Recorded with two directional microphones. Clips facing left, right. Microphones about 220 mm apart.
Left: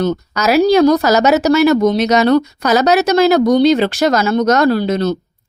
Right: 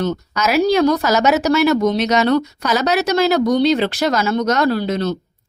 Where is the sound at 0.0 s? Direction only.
40° left (ahead or behind).